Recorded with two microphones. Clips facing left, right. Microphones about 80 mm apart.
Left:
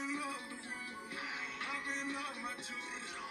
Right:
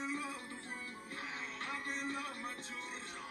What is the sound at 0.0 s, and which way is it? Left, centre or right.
Music, centre.